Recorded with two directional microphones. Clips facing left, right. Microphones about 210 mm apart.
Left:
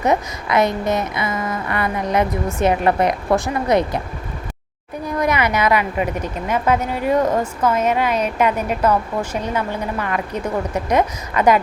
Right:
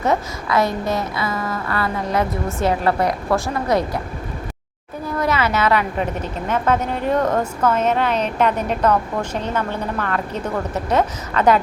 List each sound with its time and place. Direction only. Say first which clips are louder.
0.0 s a woman's voice: left 1 dB; 20° left (ahead or behind)
5.0 s a woman's voice: left 1 dB; 15° left (ahead or behind)